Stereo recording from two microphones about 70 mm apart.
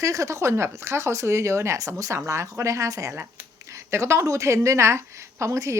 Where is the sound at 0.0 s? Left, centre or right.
Right.